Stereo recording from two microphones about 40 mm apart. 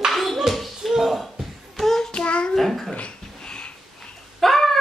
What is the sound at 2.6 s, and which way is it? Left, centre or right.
Dog, centre.